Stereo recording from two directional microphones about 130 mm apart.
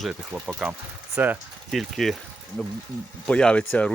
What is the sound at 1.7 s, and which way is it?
Speech, centre (ahead or behind).